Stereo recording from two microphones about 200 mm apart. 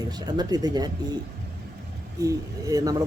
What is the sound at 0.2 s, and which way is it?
Speech, 20° right (ahead or behind).